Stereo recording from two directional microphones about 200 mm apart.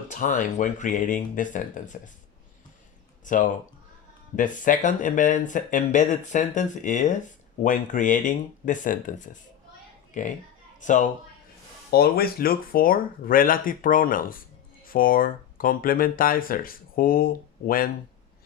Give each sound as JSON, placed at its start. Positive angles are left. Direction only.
{"t": 0.1, "sound": "speech", "side_deg": 40}
{"t": 3.2, "sound": "speech", "side_deg": 40}
{"t": 11.9, "sound": "speech", "side_deg": 50}